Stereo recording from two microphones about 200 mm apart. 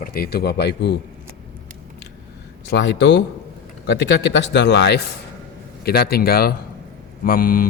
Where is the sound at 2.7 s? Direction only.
60° left (ahead or behind).